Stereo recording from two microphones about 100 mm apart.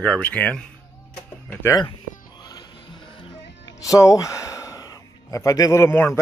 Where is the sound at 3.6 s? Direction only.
35° left (ahead or behind).